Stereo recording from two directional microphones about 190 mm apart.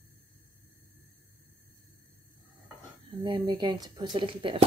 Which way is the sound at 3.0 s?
25° right (ahead or behind).